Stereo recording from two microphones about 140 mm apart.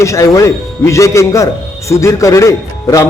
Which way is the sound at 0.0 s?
20° left (ahead or behind).